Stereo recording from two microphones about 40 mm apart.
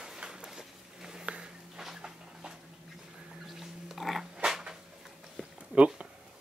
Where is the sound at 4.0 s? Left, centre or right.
Centre.